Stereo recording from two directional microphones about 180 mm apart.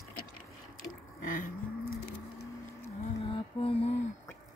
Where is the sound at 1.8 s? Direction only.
55° left (ahead or behind).